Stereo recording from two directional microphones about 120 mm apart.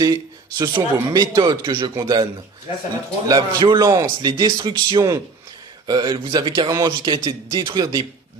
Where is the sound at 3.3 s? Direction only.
35° right (ahead or behind).